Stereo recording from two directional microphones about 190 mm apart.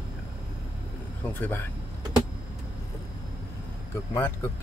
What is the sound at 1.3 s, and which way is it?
Speech, 10° left (ahead or behind).